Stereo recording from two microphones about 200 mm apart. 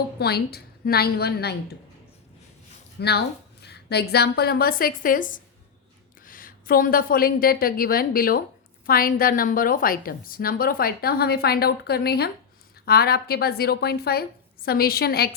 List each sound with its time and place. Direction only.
0.2 s a woman's voice: 55° left (ahead or behind)
3.0 s a woman's voice: 55° left (ahead or behind)